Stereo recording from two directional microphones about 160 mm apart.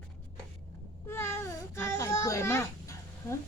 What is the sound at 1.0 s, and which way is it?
Babbling, 15° left (ahead or behind).